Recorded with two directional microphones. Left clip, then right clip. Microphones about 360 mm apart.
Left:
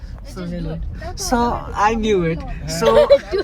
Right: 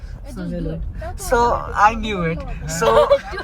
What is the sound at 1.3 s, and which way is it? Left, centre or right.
Speech, centre.